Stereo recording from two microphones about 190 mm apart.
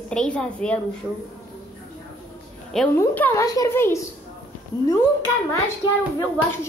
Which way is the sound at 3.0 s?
10° left (ahead or behind).